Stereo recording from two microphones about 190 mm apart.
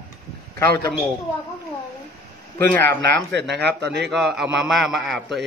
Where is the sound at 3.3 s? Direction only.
65° right (ahead or behind).